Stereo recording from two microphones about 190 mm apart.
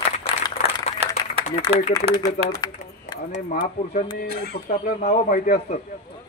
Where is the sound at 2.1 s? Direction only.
35° right (ahead or behind).